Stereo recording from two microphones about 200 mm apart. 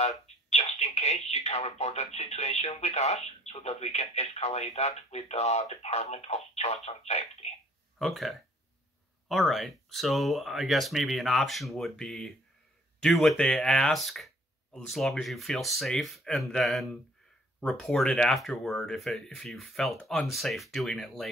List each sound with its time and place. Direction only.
0.5 s speech: 30° left (ahead or behind)
8.0 s speech: centre (ahead or behind)